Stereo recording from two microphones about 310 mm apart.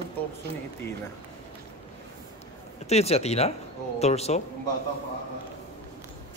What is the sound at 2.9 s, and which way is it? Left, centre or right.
Speech, centre.